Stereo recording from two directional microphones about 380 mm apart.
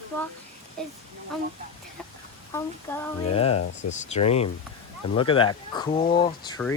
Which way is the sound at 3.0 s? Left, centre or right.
Centre.